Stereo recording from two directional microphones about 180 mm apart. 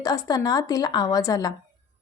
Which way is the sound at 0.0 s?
20° left (ahead or behind).